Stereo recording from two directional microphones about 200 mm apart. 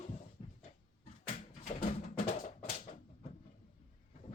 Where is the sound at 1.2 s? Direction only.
45° left (ahead or behind).